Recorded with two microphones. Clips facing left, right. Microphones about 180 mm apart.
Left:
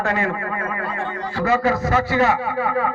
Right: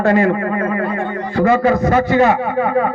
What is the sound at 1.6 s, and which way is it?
Speech, 30° right (ahead or behind).